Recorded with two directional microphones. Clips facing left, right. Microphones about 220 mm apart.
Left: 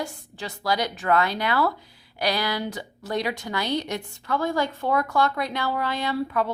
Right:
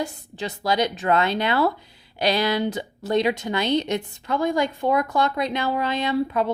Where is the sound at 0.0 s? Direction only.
20° right (ahead or behind).